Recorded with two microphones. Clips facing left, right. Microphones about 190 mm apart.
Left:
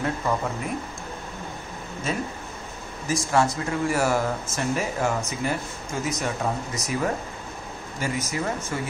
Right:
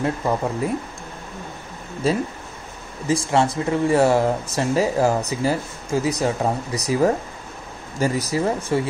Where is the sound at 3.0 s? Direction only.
25° right (ahead or behind).